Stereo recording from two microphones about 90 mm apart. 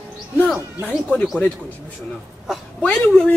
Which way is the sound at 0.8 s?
15° left (ahead or behind).